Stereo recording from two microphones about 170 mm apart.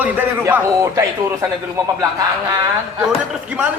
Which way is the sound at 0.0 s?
10° right (ahead or behind).